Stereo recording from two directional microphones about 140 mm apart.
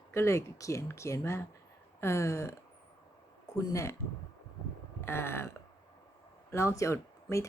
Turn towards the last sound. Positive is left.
turn(degrees=20)  # may be behind; listen again after turning